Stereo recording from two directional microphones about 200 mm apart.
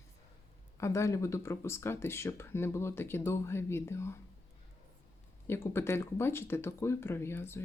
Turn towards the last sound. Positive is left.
turn(degrees=10)  # may be behind; listen again after turning